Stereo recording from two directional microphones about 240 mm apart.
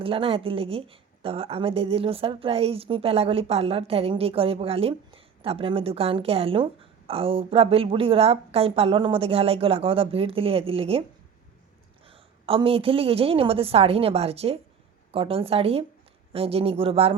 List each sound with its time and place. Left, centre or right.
0.0 s a woman's voice: right
12.0 s a woman's voice: right